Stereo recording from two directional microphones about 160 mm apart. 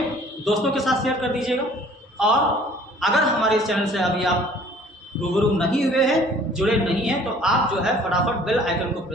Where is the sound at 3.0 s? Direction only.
Centre (ahead or behind).